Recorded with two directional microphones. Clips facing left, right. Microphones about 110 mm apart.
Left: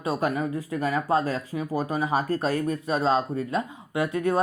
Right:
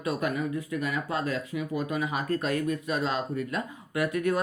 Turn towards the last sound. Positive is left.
turn(degrees=30)  # may be behind; listen again after turning